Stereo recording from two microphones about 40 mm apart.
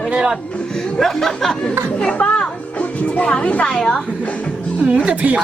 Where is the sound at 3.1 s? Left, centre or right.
Left.